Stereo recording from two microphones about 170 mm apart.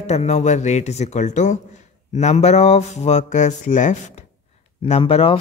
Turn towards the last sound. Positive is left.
turn(degrees=35)  # may be behind; listen again after turning